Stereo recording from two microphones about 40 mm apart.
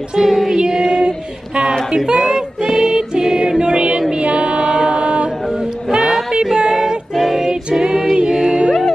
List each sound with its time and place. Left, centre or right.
0.1 s child singing: centre
1.9 s music: centre
4.1 s female singing: right
5.9 s music: centre
6.3 s a sound: centre
7.2 s music: centre